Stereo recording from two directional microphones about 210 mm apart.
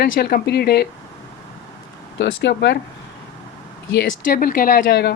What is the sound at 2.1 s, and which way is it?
Speech, 60° left (ahead or behind).